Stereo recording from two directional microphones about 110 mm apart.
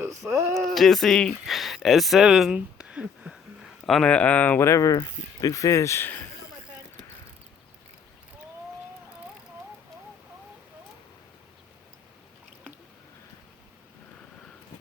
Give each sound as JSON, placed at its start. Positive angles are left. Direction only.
{"t": 0.0, "sound": "speech", "side_deg": -25}
{"t": 0.5, "sound": "speech", "side_deg": 0}
{"t": 3.8, "sound": "speech", "side_deg": 5}